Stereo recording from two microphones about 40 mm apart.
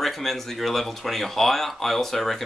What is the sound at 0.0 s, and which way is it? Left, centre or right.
Speech, centre.